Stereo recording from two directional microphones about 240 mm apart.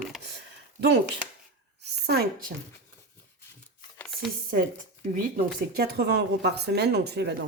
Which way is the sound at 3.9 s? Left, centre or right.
Centre.